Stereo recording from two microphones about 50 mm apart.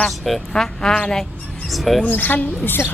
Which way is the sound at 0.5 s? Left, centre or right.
Centre.